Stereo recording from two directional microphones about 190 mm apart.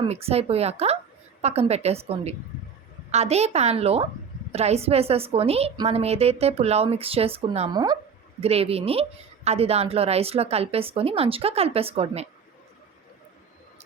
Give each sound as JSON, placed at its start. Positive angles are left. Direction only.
{"t": 0.0, "sound": "a woman's voice", "side_deg": -30}
{"t": 8.4, "sound": "a woman's voice", "side_deg": -30}